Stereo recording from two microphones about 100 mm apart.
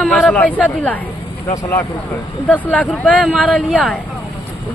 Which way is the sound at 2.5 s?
15° left (ahead or behind).